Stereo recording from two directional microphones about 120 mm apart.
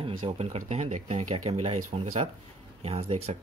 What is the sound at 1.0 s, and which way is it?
Speech, 60° right (ahead or behind).